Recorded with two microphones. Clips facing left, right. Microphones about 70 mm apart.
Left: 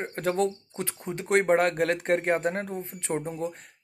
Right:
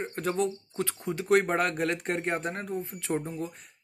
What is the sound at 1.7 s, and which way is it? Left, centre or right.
Speech, left.